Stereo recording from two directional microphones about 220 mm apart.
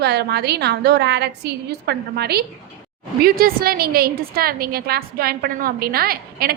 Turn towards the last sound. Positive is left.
turn(degrees=-45)  # may be behind; listen again after turning